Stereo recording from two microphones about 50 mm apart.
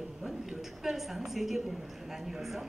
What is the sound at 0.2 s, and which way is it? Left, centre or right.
A woman's voice, centre.